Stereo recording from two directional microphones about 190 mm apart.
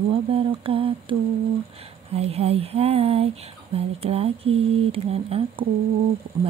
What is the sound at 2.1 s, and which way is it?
Speech, 30° right (ahead or behind).